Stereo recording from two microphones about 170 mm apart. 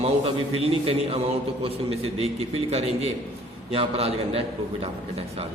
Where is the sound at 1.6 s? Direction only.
35° right (ahead or behind).